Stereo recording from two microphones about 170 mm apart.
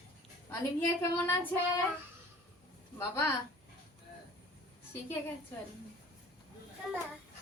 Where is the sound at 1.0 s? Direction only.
15° left (ahead or behind).